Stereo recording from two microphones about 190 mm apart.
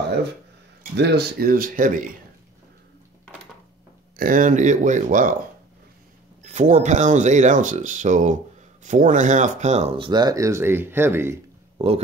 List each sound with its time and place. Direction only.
0.9 s speech: 60° right (ahead or behind)
4.2 s speech: 45° right (ahead or behind)
6.4 s speech: 40° right (ahead or behind); by 11.3 s 10° right (ahead or behind)